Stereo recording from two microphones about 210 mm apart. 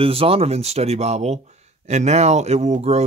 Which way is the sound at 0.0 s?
25° right (ahead or behind).